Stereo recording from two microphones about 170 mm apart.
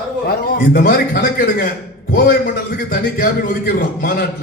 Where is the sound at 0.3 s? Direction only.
65° left (ahead or behind).